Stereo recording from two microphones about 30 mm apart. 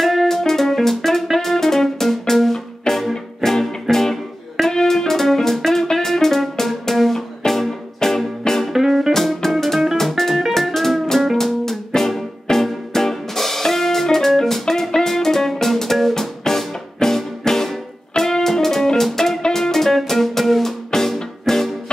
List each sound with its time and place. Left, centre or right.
0.0 s music: centre
8.7 s music: centre
9.1 s music: centre
20.9 s music: left
21.5 s music: centre